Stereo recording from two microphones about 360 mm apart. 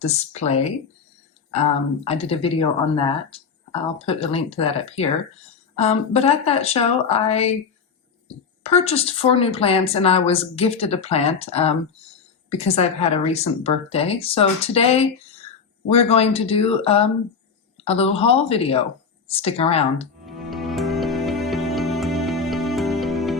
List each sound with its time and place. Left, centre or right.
0.0 s speech: centre
2.0 s speech: centre
8.6 s speech: centre
20.2 s music: centre